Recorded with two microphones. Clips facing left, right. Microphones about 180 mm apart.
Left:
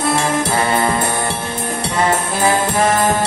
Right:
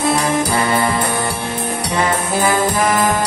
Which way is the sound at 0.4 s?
25° left (ahead or behind).